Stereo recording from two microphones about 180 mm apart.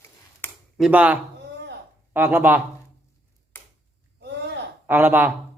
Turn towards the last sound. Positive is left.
turn(degrees=-10)  # may be behind; listen again after turning